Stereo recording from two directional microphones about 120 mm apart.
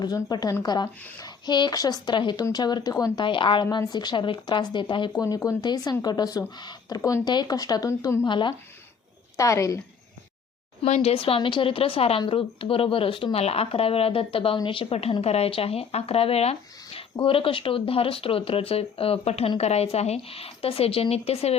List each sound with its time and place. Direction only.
0.0 s speech: 35° left (ahead or behind)
3.2 s speech: 45° left (ahead or behind)
5.1 s speech: 30° left (ahead or behind)
8.2 s speech: 40° left (ahead or behind)
9.4 s a woman's voice: 25° left (ahead or behind)
10.8 s speech: 60° left (ahead or behind)